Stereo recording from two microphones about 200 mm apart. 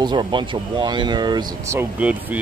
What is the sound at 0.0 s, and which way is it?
Speech, 20° right (ahead or behind).